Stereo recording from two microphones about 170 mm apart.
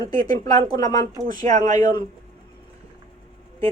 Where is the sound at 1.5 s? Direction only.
40° right (ahead or behind).